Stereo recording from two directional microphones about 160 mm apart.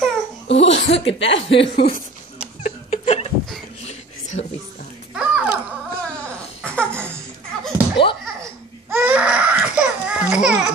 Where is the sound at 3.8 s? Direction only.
45° left (ahead or behind).